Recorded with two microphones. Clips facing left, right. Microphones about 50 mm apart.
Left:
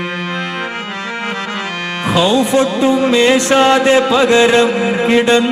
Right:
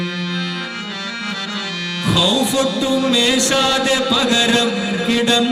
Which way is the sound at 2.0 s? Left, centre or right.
Left.